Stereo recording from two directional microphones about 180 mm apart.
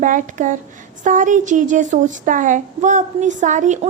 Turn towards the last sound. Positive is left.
turn(degrees=-40)  # may be behind; listen again after turning